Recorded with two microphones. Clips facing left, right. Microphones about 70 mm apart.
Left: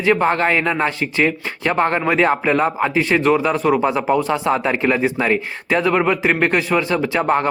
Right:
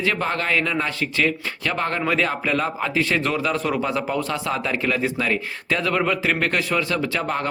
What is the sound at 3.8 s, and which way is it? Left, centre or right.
Speech, left.